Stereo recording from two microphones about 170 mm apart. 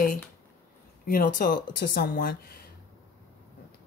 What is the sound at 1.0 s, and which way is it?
A woman's voice, 55° left (ahead or behind).